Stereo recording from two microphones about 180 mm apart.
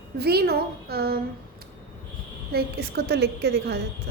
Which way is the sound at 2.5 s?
65° right (ahead or behind).